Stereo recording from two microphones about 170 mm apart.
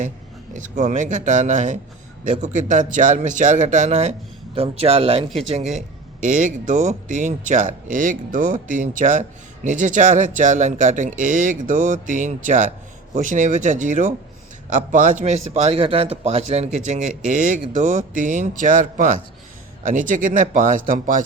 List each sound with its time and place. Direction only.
0.5 s a man's voice: 45° right (ahead or behind)